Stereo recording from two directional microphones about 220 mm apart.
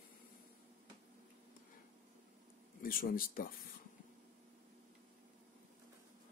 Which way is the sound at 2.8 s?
40° left (ahead or behind).